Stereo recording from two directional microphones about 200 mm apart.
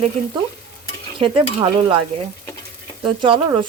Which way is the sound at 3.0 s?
25° right (ahead or behind).